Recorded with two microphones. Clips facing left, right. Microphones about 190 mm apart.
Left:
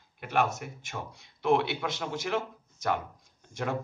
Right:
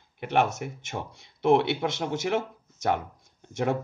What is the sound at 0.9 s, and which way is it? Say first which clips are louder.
Speech: right 4 dB; 35° right (ahead or behind).